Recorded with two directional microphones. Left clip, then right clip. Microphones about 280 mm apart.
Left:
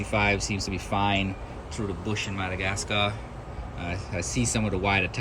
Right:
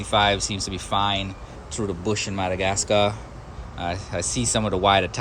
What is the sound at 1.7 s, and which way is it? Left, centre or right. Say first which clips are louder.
Speech: right 6 dB; centre.